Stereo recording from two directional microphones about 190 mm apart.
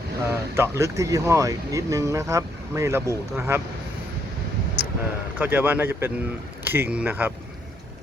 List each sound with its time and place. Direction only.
0.3 s speech: 15° right (ahead or behind)
5.4 s speech: 10° right (ahead or behind)